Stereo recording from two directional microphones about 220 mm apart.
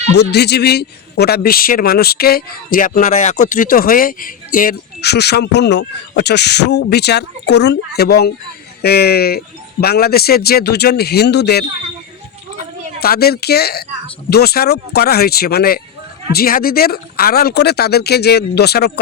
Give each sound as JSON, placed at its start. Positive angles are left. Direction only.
{"t": 0.2, "sound": "a man's voice", "side_deg": 50}
{"t": 13.0, "sound": "a man's voice", "side_deg": 45}